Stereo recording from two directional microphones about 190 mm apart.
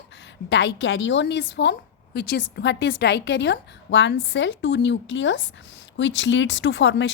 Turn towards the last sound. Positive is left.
turn(degrees=80)